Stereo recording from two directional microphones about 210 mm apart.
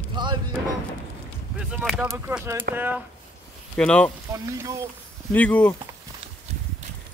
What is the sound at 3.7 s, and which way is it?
Speech, 5° left (ahead or behind).